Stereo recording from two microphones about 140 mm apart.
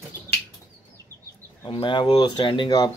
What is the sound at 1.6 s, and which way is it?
Speech, 35° left (ahead or behind).